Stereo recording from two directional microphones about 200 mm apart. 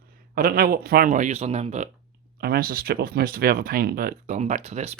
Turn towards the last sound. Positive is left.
turn(degrees=-35)  # may be behind; listen again after turning